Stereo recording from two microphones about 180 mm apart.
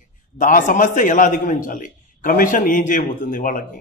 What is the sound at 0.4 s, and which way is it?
A man's voice, 45° left (ahead or behind).